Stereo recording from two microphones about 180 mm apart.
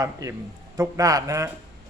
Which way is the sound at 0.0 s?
15° right (ahead or behind).